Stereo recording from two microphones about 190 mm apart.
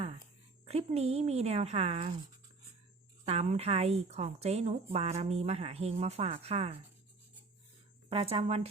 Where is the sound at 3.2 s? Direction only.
35° right (ahead or behind).